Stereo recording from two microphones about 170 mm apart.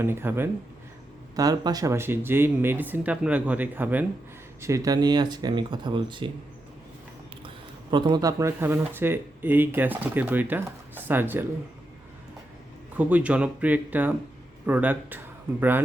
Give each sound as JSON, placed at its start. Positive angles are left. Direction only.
{"t": 0.0, "sound": "speech", "side_deg": -15}
{"t": 7.4, "sound": "speech", "side_deg": -25}
{"t": 13.0, "sound": "speech", "side_deg": -10}